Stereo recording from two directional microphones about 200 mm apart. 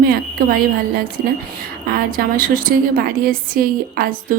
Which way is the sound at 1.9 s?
45° right (ahead or behind).